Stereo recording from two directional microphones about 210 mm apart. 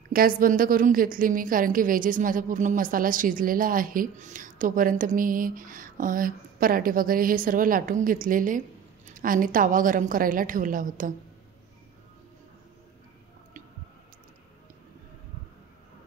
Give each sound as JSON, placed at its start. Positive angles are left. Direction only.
{"t": 0.1, "sound": "a woman's voice", "side_deg": -45}